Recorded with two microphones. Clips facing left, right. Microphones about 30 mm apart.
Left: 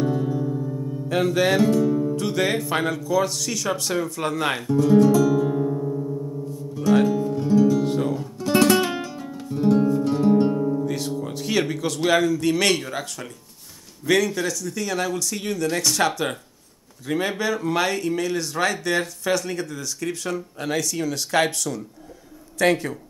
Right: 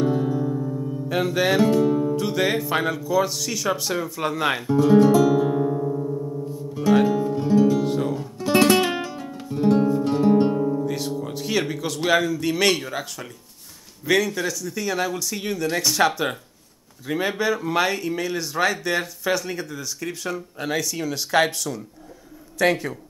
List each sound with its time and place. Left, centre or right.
0.0 s music: centre
1.9 s music: right
2.1 s speech: centre
4.6 s music: centre
7.8 s guitar: centre
14.0 s speech: centre